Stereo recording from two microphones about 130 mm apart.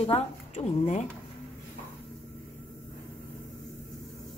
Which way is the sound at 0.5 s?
65° left (ahead or behind).